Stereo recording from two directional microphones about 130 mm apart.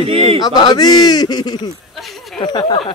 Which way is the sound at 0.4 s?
30° left (ahead or behind).